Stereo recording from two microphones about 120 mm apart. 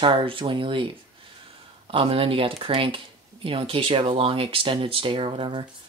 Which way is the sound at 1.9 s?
50° right (ahead or behind).